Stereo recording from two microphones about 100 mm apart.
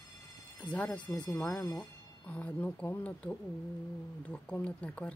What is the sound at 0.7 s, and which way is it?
Speech, 15° left (ahead or behind).